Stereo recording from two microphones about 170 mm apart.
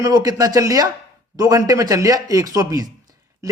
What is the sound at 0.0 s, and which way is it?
A man's voice, 20° right (ahead or behind).